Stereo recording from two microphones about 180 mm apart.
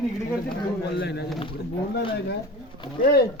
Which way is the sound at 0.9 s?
70° left (ahead or behind).